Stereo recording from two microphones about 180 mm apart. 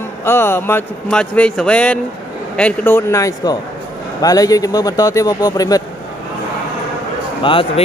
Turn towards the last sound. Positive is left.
turn(degrees=30)  # may be behind; listen again after turning